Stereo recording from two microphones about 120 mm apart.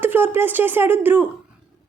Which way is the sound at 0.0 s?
15° right (ahead or behind).